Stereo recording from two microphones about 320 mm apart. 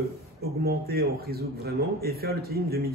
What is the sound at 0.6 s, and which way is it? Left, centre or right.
Speech, right.